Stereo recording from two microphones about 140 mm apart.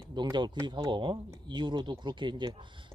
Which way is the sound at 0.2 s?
30° right (ahead or behind).